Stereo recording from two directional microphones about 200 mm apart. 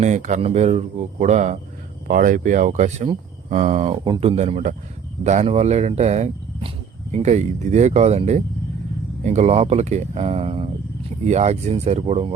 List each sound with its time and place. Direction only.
0.0 s speech: 35° right (ahead or behind)